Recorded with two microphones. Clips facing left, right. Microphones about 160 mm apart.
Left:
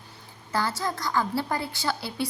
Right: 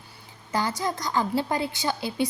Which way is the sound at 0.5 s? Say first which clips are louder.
Right 1 dB; 20° right (ahead or behind).